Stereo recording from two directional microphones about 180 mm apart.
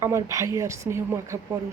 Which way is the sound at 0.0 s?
15° right (ahead or behind).